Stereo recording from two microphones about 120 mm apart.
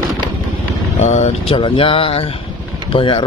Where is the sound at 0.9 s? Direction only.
75° left (ahead or behind).